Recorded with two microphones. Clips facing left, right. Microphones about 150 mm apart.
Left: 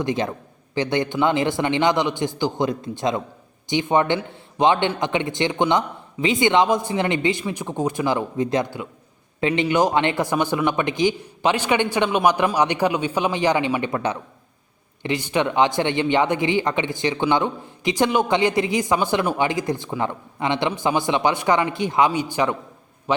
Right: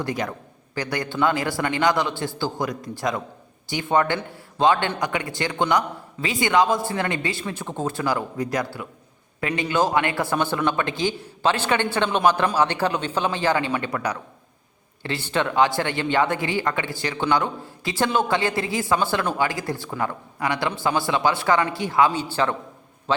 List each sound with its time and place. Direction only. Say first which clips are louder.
0.0 s speech: left 4 dB; 20° left (ahead or behind)